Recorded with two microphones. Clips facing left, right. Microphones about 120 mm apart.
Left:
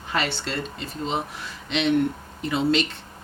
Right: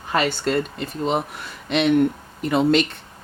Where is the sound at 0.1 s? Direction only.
45° right (ahead or behind).